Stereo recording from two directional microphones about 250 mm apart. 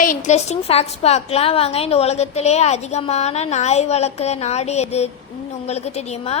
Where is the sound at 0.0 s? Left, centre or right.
Left.